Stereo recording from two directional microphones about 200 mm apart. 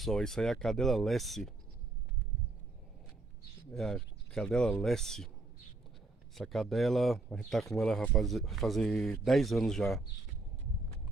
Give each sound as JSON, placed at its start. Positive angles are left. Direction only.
{"t": 0.0, "sound": "speech", "side_deg": 0}
{"t": 3.7, "sound": "speech", "side_deg": 0}
{"t": 6.3, "sound": "speech", "side_deg": 0}